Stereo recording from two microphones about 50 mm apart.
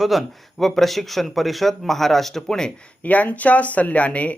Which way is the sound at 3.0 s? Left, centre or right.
Left.